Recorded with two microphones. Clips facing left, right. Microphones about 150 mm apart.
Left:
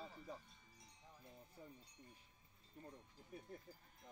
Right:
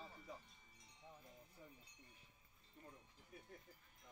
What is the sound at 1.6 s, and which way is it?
Speech, 40° left (ahead or behind).